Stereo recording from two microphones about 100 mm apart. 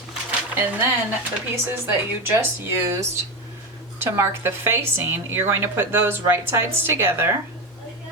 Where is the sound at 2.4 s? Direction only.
25° right (ahead or behind).